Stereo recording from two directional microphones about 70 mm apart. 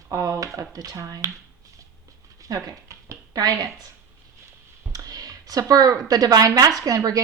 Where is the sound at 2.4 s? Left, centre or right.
Right.